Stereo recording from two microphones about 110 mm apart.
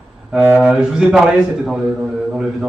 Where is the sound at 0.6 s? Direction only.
5° right (ahead or behind).